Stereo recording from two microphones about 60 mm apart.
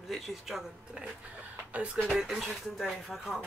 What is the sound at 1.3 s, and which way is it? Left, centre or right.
Speech, right.